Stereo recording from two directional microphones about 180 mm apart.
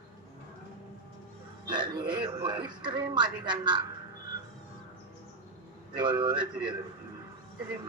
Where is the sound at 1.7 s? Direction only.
25° right (ahead or behind).